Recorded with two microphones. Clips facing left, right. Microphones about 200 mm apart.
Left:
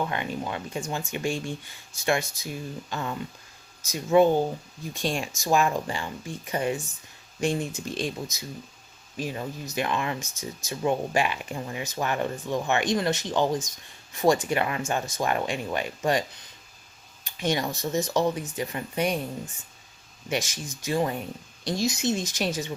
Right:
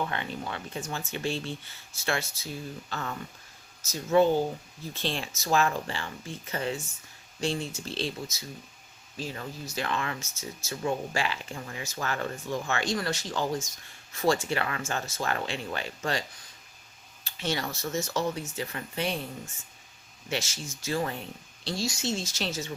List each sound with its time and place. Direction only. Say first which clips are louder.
0.1 s speech: left 4 dB; 15° left (ahead or behind)
17.2 s speech: left 5 dB; 15° left (ahead or behind)
20.3 s speech: left 4 dB; 15° left (ahead or behind)